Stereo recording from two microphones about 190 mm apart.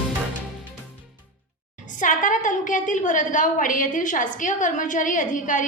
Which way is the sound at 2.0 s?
45° left (ahead or behind).